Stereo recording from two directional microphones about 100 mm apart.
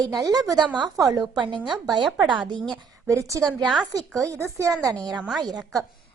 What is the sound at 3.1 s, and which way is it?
Speech, 30° right (ahead or behind).